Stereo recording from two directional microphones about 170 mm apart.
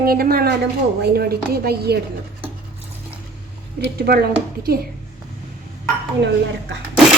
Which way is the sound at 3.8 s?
65° right (ahead or behind).